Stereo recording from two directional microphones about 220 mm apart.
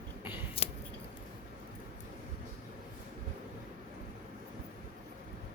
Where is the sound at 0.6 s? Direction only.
25° left (ahead or behind).